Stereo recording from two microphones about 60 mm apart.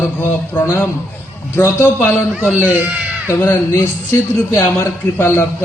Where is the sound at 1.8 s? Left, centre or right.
Left.